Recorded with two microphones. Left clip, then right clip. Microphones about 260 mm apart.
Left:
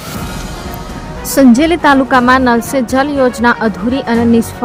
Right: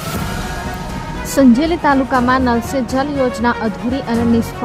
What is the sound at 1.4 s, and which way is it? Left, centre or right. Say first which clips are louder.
A woman's voice: left 4 dB; centre.